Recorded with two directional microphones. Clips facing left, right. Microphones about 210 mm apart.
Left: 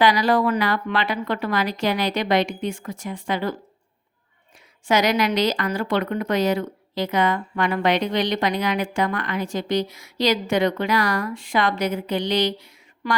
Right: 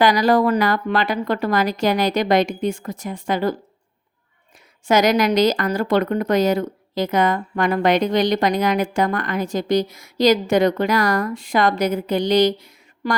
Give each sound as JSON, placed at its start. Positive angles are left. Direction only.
{"t": 0.0, "sound": "speech", "side_deg": -45}
{"t": 4.9, "sound": "speech", "side_deg": -45}